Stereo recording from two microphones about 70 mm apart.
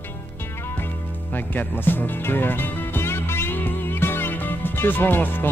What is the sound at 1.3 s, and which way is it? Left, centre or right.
Music, left.